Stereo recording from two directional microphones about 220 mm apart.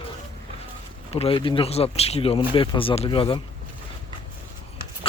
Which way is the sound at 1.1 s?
25° left (ahead or behind).